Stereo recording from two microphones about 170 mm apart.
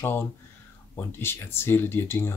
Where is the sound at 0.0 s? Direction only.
15° left (ahead or behind).